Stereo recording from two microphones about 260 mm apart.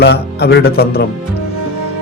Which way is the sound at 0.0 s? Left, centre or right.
Left.